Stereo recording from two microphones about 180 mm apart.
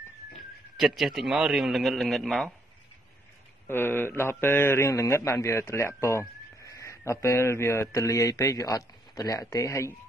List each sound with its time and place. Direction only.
0.7 s a man's voice: centre (ahead or behind)
3.6 s a man's voice: 10° left (ahead or behind)